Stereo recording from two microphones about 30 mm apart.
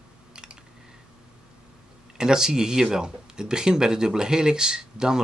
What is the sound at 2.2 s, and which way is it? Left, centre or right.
Speech, right.